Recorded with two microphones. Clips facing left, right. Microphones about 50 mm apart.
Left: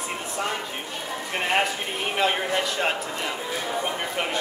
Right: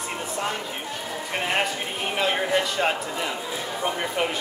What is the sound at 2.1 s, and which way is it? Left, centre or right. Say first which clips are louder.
A man's voice: right 1 dB; centre.